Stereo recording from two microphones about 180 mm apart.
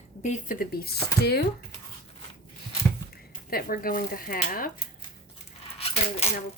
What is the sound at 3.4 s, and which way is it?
Speech, 55° left (ahead or behind).